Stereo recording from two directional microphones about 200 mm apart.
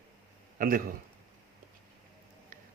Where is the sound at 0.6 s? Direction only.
45° right (ahead or behind).